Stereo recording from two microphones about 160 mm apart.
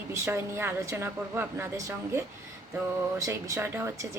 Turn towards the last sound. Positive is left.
turn(degrees=-20)  # may be behind; listen again after turning